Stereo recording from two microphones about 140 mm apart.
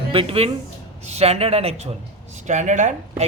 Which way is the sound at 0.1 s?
45° right (ahead or behind).